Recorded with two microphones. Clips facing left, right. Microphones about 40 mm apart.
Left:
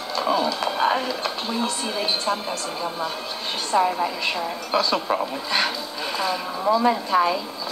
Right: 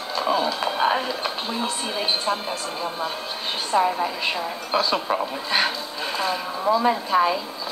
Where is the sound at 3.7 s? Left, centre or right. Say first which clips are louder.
Even; centre.